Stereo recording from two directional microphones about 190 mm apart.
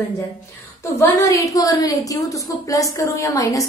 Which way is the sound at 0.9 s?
15° left (ahead or behind).